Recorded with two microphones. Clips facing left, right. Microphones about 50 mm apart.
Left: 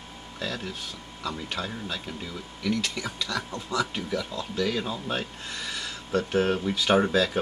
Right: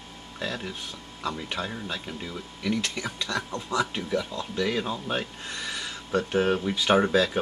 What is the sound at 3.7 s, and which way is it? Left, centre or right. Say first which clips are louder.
Speech: right 1 dB; centre.